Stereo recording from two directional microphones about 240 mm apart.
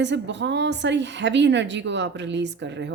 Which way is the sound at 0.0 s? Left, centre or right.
Right.